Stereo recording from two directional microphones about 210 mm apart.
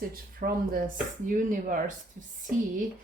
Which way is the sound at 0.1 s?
45° right (ahead or behind).